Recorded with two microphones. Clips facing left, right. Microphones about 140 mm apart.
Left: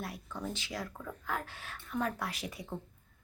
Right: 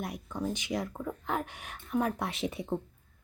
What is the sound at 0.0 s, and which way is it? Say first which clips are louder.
Speech: right 5 dB; 15° right (ahead or behind).